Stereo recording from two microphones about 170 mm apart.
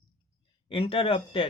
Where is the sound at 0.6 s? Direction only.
30° left (ahead or behind).